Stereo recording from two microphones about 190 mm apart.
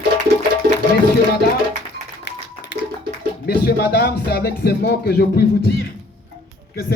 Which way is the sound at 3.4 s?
55° left (ahead or behind).